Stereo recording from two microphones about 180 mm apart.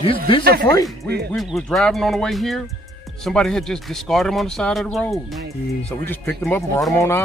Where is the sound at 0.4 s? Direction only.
60° right (ahead or behind).